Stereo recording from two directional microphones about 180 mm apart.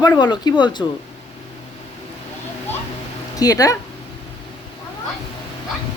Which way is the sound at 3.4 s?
20° left (ahead or behind).